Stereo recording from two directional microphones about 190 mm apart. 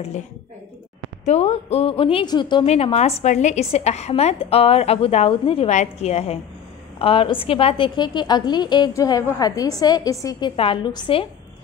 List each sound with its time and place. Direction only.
1.2 s a woman's voice: 35° left (ahead or behind)